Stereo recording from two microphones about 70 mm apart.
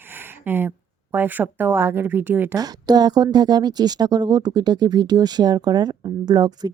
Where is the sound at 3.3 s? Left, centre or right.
Right.